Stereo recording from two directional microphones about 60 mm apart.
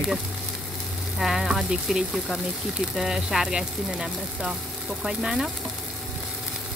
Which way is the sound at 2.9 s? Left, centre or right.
Centre.